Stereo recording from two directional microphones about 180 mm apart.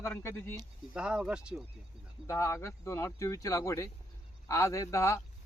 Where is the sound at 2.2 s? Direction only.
15° left (ahead or behind).